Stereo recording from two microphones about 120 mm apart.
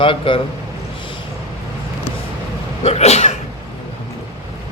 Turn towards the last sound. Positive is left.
turn(degrees=65)  # may be behind; listen again after turning